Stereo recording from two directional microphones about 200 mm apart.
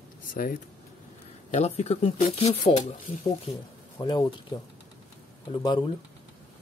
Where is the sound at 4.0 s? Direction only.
20° left (ahead or behind).